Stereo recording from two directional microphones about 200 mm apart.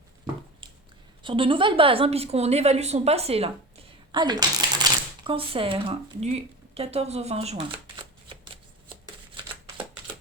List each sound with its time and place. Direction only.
1.2 s a woman's voice: 25° right (ahead or behind)